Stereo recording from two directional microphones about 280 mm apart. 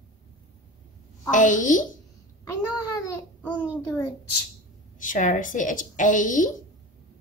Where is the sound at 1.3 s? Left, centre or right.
Left.